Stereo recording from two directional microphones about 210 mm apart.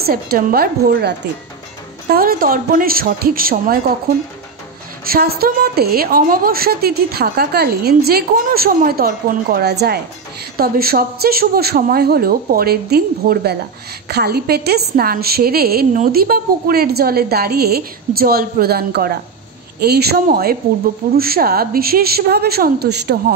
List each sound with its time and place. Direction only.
0.0 s a woman's voice: 45° right (ahead or behind)
5.0 s a woman's voice: 45° right (ahead or behind)